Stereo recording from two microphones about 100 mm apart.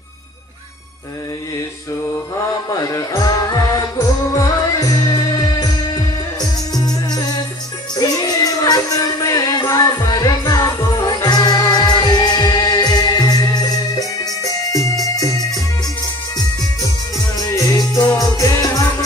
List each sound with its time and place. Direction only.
2.7 s music: 35° left (ahead or behind)
17.4 s music: 40° left (ahead or behind)